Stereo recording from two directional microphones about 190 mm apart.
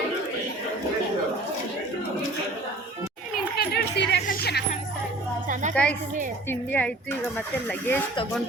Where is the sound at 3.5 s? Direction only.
55° left (ahead or behind).